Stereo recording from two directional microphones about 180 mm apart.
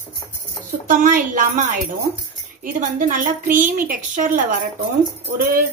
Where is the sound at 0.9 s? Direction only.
45° right (ahead or behind).